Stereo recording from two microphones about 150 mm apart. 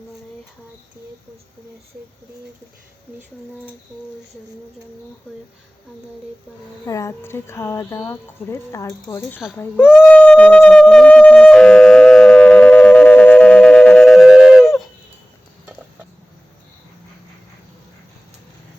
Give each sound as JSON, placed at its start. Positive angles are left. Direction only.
{"t": 6.8, "sound": "speech", "side_deg": 20}
{"t": 9.9, "sound": "wind instrument", "side_deg": 10}